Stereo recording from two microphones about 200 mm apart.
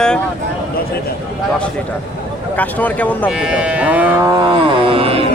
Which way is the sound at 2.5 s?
10° left (ahead or behind).